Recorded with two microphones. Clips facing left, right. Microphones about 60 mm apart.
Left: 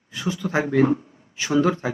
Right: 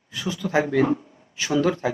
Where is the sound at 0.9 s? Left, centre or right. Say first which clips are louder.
Left 1 dB; centre.